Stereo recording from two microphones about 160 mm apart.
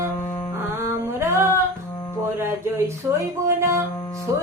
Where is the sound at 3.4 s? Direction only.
15° right (ahead or behind).